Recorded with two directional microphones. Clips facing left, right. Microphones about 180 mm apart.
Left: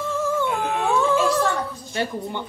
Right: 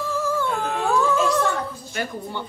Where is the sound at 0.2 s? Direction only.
20° left (ahead or behind).